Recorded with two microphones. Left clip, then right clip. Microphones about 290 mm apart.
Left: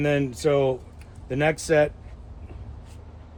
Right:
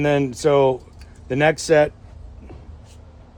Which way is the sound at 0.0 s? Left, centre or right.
Right.